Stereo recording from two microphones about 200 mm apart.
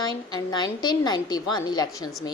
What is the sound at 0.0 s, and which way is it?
A woman's voice, 20° left (ahead or behind).